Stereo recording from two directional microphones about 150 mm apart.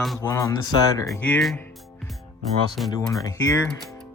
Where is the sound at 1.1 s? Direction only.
10° left (ahead or behind).